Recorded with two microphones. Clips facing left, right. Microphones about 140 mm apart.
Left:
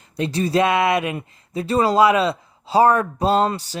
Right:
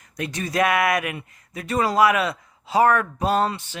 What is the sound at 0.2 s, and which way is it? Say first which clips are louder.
Speech: left 4 dB; 30° left (ahead or behind).